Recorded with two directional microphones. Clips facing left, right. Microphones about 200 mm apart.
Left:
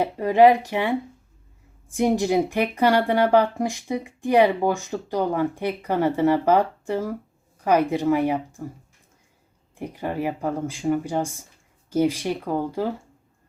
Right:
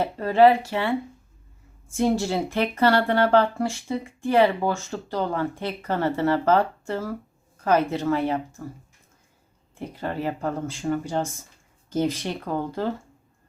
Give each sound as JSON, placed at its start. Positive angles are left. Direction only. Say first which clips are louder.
{"t": 0.0, "sound": "speech", "louder": "left 1 dB", "side_deg": 15}
{"t": 9.7, "sound": "speech", "louder": "left 2 dB", "side_deg": 15}